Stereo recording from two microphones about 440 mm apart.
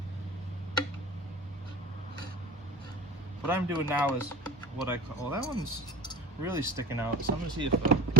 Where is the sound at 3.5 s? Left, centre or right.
Centre.